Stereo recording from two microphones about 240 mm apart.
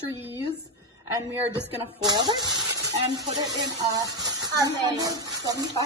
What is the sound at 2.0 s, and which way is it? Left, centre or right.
A woman's voice, centre.